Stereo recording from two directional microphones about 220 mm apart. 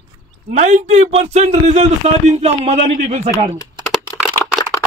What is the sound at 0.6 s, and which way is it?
Speech, 35° right (ahead or behind).